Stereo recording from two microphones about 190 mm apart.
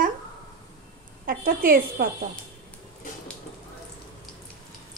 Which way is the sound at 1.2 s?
50° right (ahead or behind).